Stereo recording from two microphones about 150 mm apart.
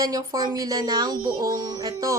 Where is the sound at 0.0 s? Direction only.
25° right (ahead or behind).